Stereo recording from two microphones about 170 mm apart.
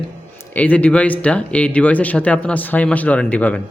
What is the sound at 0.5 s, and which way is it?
Speech, 10° left (ahead or behind).